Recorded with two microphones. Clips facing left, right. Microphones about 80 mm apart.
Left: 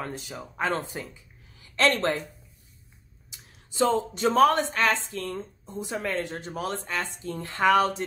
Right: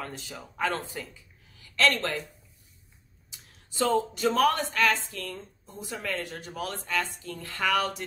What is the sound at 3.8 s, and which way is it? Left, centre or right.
Speech, left.